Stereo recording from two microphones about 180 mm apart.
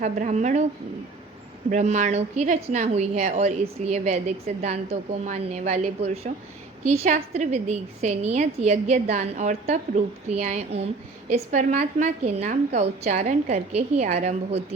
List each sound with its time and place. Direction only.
0.0 s a woman's voice: 40° right (ahead or behind)
1.7 s a woman's voice: 40° right (ahead or behind)
11.9 s a woman's voice: 40° right (ahead or behind)